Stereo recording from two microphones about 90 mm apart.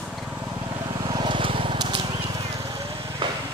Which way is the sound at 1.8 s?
65° right (ahead or behind).